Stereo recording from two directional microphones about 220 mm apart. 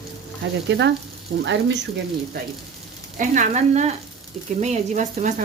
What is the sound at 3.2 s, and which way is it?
Speech, 35° right (ahead or behind).